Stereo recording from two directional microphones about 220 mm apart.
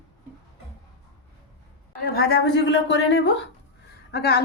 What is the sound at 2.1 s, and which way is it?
A woman's voice, 45° left (ahead or behind).